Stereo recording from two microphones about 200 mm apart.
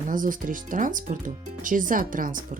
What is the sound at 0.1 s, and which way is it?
Speech, 40° right (ahead or behind).